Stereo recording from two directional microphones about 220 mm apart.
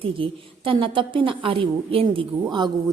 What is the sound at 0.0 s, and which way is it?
A woman's voice, 25° right (ahead or behind).